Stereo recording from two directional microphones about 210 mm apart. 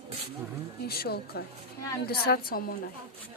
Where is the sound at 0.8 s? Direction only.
50° left (ahead or behind).